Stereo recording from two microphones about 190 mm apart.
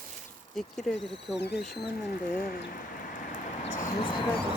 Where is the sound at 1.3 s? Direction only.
60° left (ahead or behind).